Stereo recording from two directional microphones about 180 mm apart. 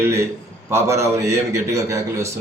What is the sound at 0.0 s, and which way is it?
A man's voice, 15° right (ahead or behind).